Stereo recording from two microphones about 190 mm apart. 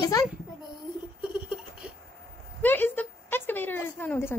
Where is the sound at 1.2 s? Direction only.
5° right (ahead or behind).